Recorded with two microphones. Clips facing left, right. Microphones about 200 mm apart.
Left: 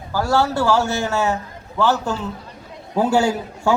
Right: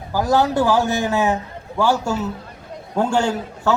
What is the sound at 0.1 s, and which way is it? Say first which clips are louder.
A man's voice: right 1 dB; 15° right (ahead or behind).